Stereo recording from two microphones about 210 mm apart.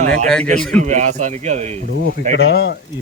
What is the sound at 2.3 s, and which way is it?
Speech, 50° left (ahead or behind).